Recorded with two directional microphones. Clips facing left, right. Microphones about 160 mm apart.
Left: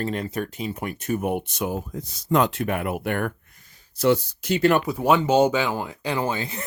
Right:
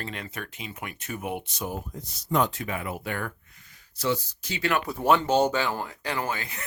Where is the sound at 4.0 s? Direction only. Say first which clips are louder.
Left 8 dB; 65° left (ahead or behind).